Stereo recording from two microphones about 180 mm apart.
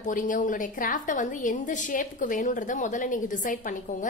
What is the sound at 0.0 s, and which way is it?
A woman's voice, 45° left (ahead or behind).